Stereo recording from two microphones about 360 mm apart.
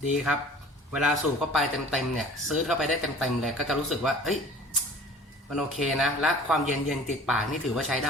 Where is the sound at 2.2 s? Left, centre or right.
Centre.